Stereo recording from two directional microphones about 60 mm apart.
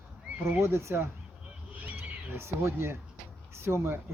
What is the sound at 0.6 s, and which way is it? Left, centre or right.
Speech, right.